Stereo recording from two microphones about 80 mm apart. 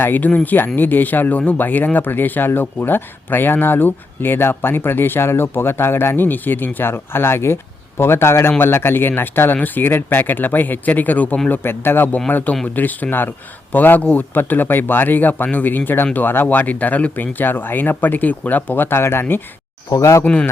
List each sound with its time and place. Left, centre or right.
0.0 s speech: left
19.9 s speech: left
20.2 s speech: centre